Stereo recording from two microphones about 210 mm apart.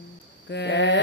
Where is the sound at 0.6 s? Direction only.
55° left (ahead or behind).